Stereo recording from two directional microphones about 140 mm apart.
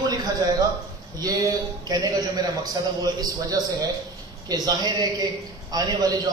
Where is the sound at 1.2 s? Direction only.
25° right (ahead or behind).